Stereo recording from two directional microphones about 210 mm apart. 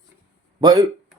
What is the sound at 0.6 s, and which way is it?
Speech, 20° right (ahead or behind).